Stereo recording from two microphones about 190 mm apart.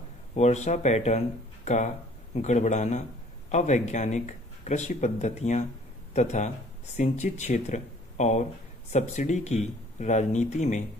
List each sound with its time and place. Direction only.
0.3 s a man's voice: 35° left (ahead or behind)